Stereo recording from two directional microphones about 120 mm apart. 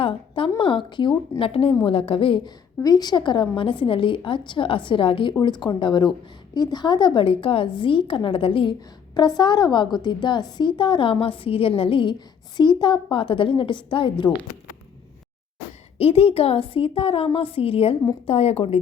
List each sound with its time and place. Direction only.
0.0 s a woman's voice: 45° left (ahead or behind)
2.8 s a woman's voice: 35° left (ahead or behind)
9.1 s a woman's voice: 35° left (ahead or behind)
16.0 s a woman's voice: 55° left (ahead or behind)